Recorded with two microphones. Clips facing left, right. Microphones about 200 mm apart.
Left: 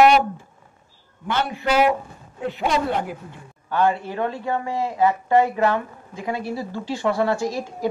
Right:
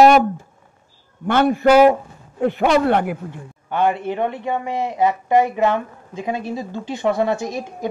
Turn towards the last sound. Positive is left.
turn(degrees=-20)  # may be behind; listen again after turning